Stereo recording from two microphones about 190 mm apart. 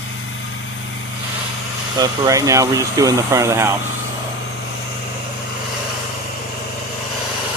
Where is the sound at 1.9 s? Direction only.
20° right (ahead or behind).